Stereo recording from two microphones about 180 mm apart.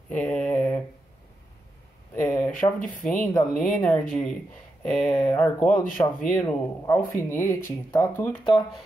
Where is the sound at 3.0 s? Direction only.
5° left (ahead or behind).